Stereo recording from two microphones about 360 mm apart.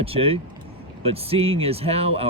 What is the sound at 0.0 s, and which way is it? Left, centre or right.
A man's voice, centre.